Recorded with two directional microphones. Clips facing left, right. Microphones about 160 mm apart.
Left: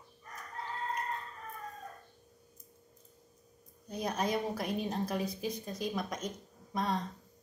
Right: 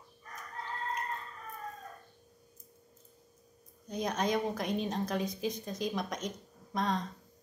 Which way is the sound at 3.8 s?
5° left (ahead or behind).